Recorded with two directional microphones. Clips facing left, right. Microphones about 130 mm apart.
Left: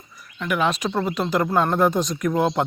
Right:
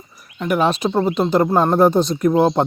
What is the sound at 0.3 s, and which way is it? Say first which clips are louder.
Speech: right 5 dB; 35° right (ahead or behind).